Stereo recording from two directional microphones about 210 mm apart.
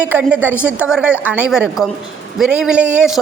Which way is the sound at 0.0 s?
10° right (ahead or behind).